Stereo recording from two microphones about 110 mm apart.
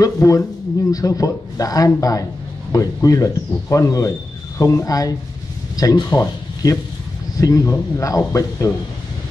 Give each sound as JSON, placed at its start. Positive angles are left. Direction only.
{"t": 0.0, "sound": "a man's voice", "side_deg": 30}